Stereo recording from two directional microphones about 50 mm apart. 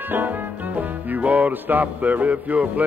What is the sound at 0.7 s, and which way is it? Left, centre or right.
Music, right.